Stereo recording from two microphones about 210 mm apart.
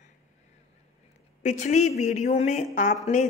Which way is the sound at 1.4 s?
35° left (ahead or behind).